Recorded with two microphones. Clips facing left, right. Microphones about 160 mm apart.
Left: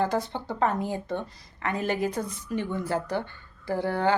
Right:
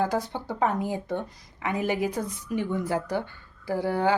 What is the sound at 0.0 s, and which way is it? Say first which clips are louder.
A woman's voice: even; 10° right (ahead or behind).